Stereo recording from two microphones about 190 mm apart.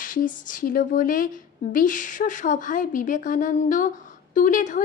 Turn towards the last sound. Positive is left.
turn(degrees=45)  # may be behind; listen again after turning